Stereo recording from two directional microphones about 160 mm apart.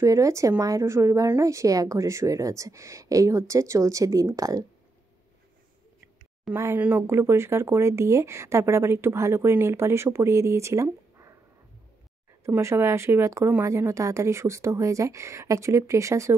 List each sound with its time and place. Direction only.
0.0 s a woman's voice: 20° right (ahead or behind)
6.5 s speech: 15° right (ahead or behind)
12.4 s speech: 15° right (ahead or behind)